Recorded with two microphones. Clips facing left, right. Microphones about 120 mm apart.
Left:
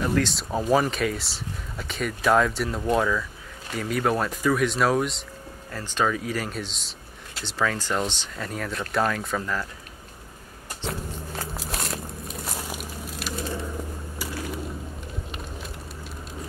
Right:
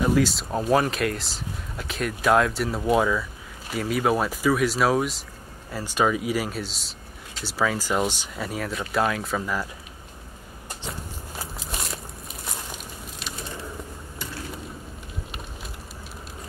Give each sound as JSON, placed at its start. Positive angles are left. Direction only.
{"t": 0.0, "sound": "speech", "side_deg": -5}
{"t": 10.9, "sound": "biting", "side_deg": 0}